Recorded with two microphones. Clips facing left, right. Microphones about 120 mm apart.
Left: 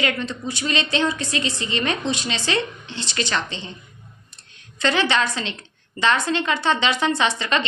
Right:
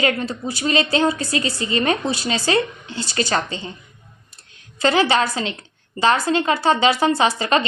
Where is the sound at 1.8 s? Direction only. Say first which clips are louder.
Right 3 dB; 35° right (ahead or behind).